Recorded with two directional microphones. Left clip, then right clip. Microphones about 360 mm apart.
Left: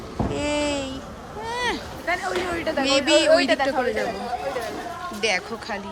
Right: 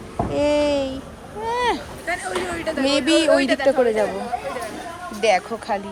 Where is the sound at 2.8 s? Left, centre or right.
Centre.